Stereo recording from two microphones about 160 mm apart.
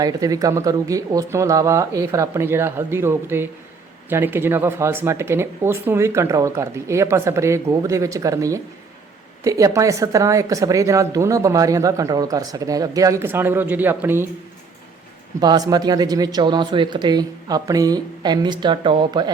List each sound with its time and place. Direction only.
0.0 s speech: 20° right (ahead or behind)
15.4 s speech: 25° right (ahead or behind)